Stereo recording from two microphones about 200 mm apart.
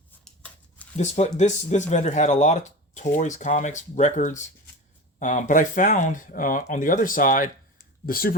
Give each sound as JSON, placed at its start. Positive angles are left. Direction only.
{"t": 0.9, "sound": "speech", "side_deg": 35}